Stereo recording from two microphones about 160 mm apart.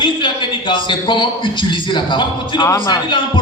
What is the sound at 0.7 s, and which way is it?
A man's voice, 30° left (ahead or behind).